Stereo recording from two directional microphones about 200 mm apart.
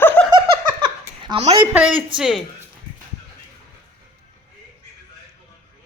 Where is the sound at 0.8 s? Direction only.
25° right (ahead or behind).